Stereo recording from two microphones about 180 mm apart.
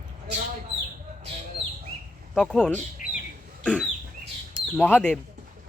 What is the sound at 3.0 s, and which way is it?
Bird, 45° left (ahead or behind).